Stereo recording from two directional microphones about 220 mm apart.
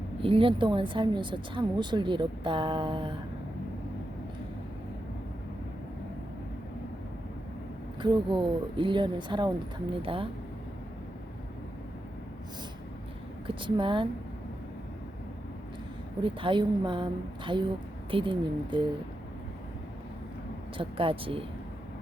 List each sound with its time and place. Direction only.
0.2 s speech: 25° right (ahead or behind)
8.0 s speech: 20° right (ahead or behind)
13.5 s speech: 20° right (ahead or behind)
16.2 s speech: 25° right (ahead or behind)
20.7 s speech: 25° right (ahead or behind)